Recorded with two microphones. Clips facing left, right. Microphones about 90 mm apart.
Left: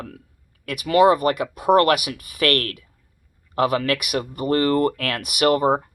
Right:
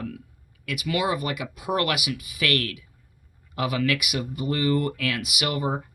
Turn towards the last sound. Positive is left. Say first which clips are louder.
# left 9 dB
turn(degrees=45)  # may be behind; listen again after turning